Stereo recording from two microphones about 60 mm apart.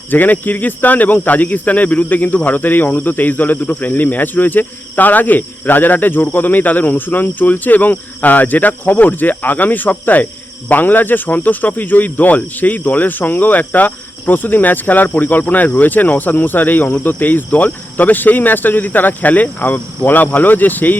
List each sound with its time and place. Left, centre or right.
0.1 s speech: left
15.8 s cricket: left